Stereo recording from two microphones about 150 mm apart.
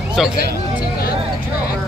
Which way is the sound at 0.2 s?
Centre (ahead or behind).